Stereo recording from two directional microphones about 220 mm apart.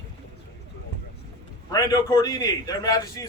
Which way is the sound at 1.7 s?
15° left (ahead or behind).